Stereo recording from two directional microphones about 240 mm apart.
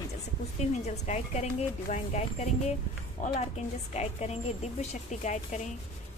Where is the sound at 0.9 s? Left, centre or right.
Left.